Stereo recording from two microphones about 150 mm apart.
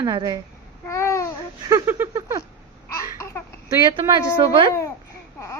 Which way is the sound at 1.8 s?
15° right (ahead or behind).